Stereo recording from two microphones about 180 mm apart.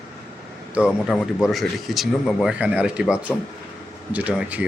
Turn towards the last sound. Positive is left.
turn(degrees=-5)  # may be behind; listen again after turning